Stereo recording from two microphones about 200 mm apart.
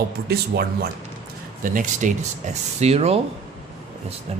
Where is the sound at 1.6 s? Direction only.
40° right (ahead or behind).